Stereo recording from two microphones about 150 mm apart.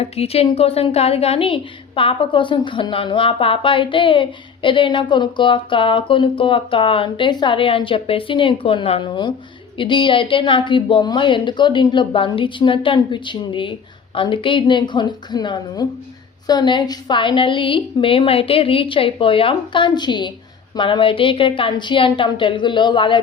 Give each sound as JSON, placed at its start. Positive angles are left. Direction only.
{"t": 0.0, "sound": "a woman's voice", "side_deg": 40}